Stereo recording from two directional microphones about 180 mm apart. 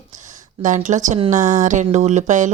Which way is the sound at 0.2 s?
45° right (ahead or behind).